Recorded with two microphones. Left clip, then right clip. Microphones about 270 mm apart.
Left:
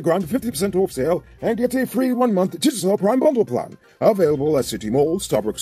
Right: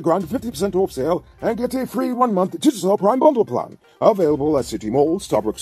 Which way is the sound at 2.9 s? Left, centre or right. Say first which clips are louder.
Right 2 dB; right.